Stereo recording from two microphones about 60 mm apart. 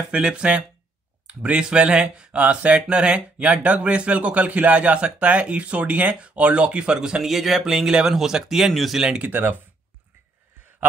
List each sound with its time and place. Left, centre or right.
0.1 s speech: centre
9.2 s speech: right